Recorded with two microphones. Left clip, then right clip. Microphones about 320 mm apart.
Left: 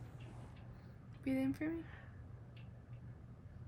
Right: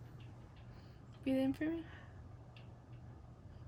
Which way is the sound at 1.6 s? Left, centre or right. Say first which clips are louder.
Right 2 dB; centre.